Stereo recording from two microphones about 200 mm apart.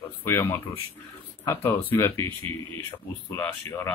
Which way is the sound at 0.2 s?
10° left (ahead or behind).